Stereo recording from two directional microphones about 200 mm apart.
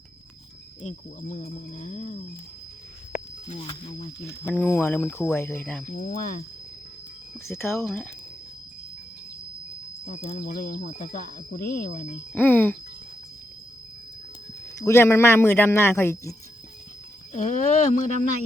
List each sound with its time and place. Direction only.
0.8 s speech: 35° left (ahead or behind)
3.4 s speech: 30° left (ahead or behind)
4.4 s speech: 10° left (ahead or behind)
5.9 s speech: 40° left (ahead or behind)
7.3 s speech: 10° left (ahead or behind)
10.1 s speech: 35° left (ahead or behind)
12.3 s speech: 10° left (ahead or behind)
14.8 s speech: 15° left (ahead or behind)
17.3 s speech: 40° left (ahead or behind)